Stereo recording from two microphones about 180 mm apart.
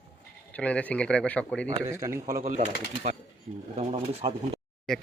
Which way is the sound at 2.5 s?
45° right (ahead or behind).